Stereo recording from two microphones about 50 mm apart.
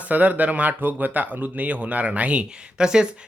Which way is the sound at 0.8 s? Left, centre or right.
Right.